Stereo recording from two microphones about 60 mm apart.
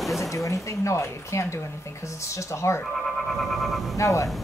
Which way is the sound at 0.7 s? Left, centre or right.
Left.